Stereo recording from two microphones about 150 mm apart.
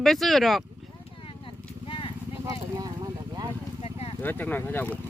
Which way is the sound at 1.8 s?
35° left (ahead or behind).